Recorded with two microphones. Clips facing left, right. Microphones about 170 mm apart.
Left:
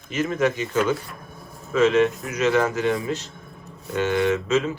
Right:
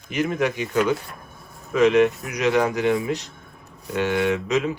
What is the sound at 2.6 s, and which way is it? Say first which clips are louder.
Speech: right 3 dB; 15° right (ahead or behind).